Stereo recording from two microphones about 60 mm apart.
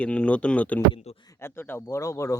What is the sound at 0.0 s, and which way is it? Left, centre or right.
Speech, centre.